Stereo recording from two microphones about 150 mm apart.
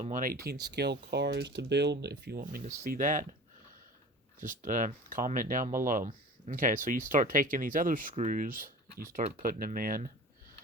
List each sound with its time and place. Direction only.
0.0 s speech: 60° right (ahead or behind)
4.4 s speech: 60° right (ahead or behind)